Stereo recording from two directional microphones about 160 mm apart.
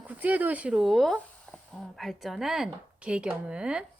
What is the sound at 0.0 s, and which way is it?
Speech, 10° right (ahead or behind).